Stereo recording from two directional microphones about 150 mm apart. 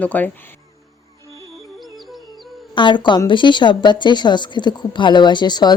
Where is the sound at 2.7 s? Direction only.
30° left (ahead or behind).